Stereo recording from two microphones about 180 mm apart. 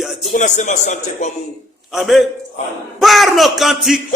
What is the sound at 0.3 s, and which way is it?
Speech, 40° left (ahead or behind).